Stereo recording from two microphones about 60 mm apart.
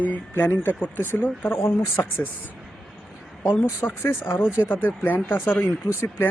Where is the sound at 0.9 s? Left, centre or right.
Left.